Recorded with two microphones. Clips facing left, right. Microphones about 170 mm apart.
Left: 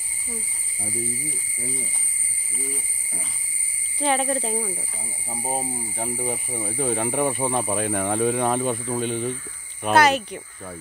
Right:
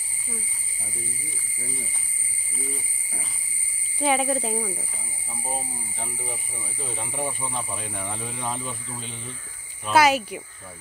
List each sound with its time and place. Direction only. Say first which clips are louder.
4.0 s speech: even; 5° right (ahead or behind)
5.3 s speech: left 5 dB; 45° left (ahead or behind); by 9.4 s 60° left (ahead or behind)
9.9 s speech: even; 5° right (ahead or behind)